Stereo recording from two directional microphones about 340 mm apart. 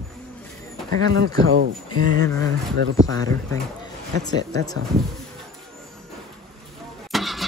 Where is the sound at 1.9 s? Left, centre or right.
Centre.